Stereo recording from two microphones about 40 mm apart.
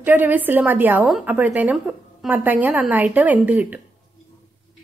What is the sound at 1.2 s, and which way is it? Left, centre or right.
A woman's voice, right.